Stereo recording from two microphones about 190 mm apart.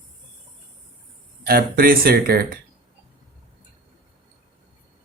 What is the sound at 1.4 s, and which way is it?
Speech, 55° right (ahead or behind).